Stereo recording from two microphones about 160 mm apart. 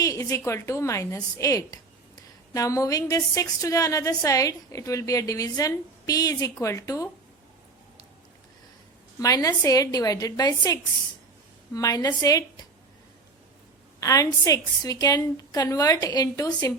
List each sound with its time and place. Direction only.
0.0 s a woman's voice: 20° left (ahead or behind)
9.1 s a woman's voice: 20° left (ahead or behind)
14.0 s a woman's voice: 20° left (ahead or behind)